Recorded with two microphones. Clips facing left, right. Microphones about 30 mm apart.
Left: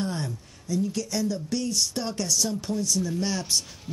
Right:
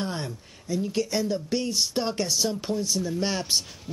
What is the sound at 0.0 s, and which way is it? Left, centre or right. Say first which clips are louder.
Speech: left 1 dB; right.